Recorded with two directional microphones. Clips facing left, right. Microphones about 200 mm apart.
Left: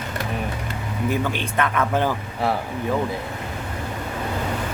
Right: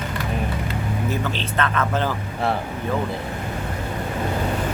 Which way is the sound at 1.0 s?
15° left (ahead or behind).